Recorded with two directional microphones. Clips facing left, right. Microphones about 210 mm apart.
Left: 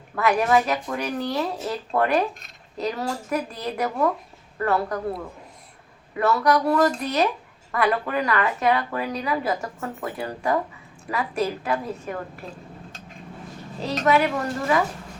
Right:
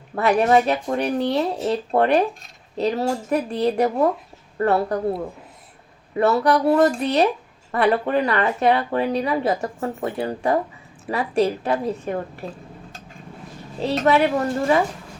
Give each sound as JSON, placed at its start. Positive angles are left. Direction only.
{"t": 0.2, "sound": "speech", "side_deg": -30}
{"t": 13.7, "sound": "speech", "side_deg": -30}